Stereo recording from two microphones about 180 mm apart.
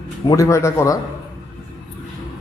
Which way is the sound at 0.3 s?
15° left (ahead or behind).